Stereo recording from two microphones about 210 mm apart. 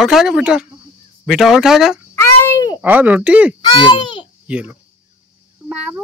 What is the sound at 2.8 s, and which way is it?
Speech, 10° right (ahead or behind).